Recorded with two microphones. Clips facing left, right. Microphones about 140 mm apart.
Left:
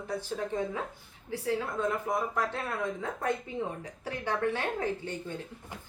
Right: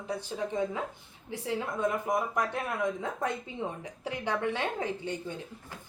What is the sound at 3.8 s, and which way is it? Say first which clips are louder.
A woman's voice: right 1 dB; 15° right (ahead or behind).